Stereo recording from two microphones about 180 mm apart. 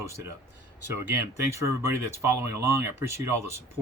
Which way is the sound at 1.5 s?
15° right (ahead or behind).